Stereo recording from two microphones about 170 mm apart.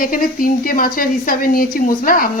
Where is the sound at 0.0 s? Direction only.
55° left (ahead or behind).